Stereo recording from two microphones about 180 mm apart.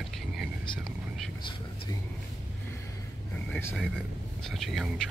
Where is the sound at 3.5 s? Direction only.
10° left (ahead or behind).